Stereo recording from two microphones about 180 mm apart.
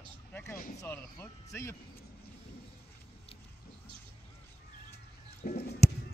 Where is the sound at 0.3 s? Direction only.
10° left (ahead or behind).